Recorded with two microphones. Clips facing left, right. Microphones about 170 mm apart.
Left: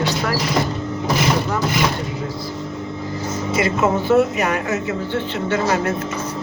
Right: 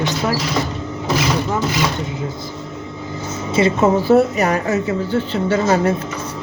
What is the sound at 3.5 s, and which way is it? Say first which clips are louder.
Speech: right 4 dB; 30° right (ahead or behind).